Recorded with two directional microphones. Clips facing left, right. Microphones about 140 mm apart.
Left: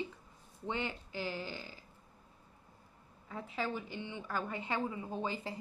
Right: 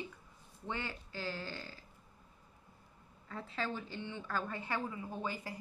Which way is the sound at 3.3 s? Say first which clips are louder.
Left 2 dB; 15° left (ahead or behind).